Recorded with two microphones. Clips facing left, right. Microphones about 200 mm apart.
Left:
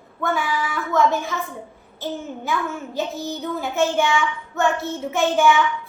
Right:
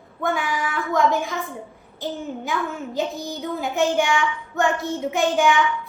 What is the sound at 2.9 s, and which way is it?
A child's voice, 15° right (ahead or behind).